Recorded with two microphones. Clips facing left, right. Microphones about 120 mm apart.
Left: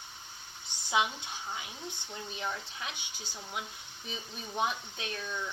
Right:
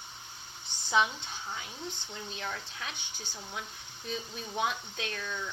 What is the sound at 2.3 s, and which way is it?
Speech, 15° left (ahead or behind).